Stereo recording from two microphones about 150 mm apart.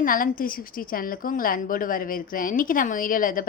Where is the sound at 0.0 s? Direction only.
70° left (ahead or behind).